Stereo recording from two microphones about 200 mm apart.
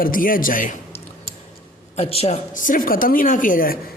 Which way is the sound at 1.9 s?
30° left (ahead or behind).